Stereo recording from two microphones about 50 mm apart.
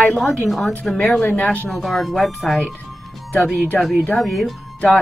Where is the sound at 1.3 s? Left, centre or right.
Left.